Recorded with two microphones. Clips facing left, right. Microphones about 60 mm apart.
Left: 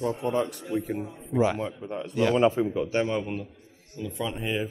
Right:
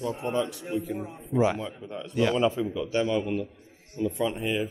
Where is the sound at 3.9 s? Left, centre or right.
Right.